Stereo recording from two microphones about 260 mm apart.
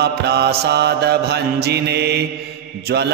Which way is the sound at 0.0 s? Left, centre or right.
Right.